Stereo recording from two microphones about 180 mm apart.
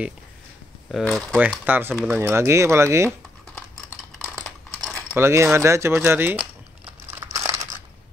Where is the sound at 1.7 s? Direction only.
10° right (ahead or behind).